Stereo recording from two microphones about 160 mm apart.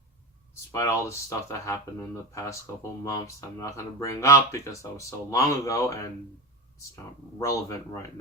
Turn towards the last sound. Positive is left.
turn(degrees=20)  # may be behind; listen again after turning